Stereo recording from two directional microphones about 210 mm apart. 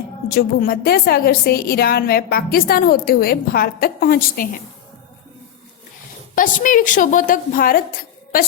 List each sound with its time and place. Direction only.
0.3 s a woman's voice: 45° left (ahead or behind)
6.3 s a woman's voice: 40° left (ahead or behind)